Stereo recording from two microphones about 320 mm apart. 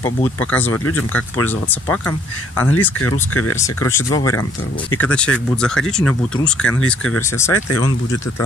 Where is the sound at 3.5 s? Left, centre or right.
Centre.